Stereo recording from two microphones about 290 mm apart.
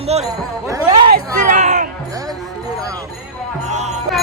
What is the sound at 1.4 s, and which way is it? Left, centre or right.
Music, right.